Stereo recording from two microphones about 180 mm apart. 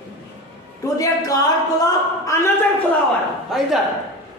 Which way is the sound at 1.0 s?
20° left (ahead or behind).